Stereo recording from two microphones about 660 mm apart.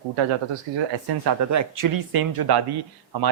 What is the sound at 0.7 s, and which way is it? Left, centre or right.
Speech, right.